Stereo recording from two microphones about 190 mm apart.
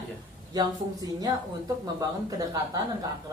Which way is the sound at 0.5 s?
20° right (ahead or behind).